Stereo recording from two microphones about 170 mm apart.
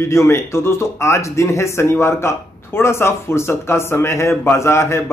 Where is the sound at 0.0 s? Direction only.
15° left (ahead or behind).